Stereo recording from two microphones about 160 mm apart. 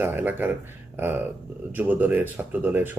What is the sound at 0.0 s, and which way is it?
Speech, 10° right (ahead or behind).